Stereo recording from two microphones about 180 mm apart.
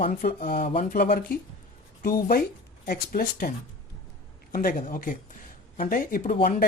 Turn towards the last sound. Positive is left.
turn(degrees=55)  # may be behind; listen again after turning